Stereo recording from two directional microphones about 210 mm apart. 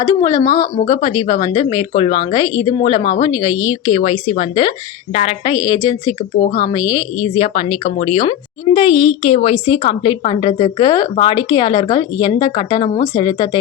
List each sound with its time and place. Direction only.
0.1 s speech: 15° left (ahead or behind)